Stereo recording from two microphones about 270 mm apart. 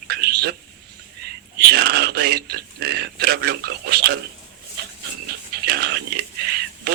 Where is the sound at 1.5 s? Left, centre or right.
Right.